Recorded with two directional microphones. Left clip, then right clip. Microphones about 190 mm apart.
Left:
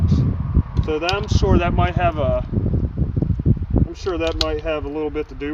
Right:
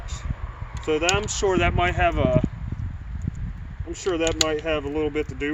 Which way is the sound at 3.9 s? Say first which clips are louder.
Right 1 dB; 10° right (ahead or behind).